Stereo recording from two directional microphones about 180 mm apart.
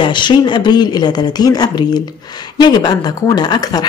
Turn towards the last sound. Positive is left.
turn(degrees=20)  # may be behind; listen again after turning